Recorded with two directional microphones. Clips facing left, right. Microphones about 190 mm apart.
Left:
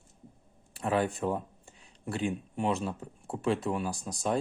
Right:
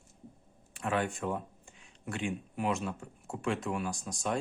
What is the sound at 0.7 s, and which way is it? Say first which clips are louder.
Speech: left 3 dB; 35° left (ahead or behind).